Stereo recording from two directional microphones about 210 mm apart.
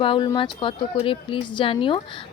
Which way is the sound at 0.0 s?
25° left (ahead or behind).